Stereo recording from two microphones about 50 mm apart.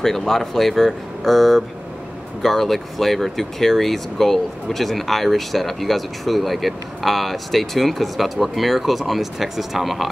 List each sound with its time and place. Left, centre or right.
0.0 s speech: centre